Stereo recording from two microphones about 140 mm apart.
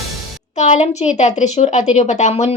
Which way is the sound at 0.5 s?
55° left (ahead or behind).